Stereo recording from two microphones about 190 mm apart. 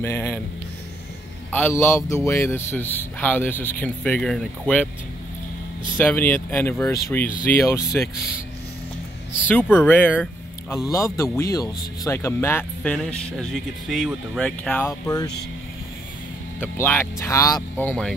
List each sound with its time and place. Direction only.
0.0 s speech: 10° left (ahead or behind)
1.5 s a man's voice: 10° left (ahead or behind)
5.9 s a man's voice: 10° left (ahead or behind)
9.5 s a man's voice: 10° left (ahead or behind)
15.0 s speech: 20° left (ahead or behind)
16.6 s a man's voice: 10° left (ahead or behind)